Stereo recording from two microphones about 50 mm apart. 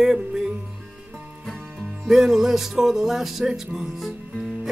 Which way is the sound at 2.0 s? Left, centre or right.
Centre.